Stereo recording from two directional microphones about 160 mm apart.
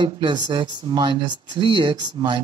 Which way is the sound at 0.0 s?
30° right (ahead or behind).